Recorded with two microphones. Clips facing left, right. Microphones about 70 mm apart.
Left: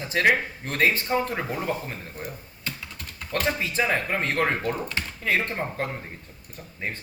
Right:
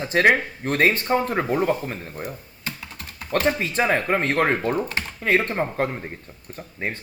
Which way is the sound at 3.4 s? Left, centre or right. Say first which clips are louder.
Right 3 dB; right.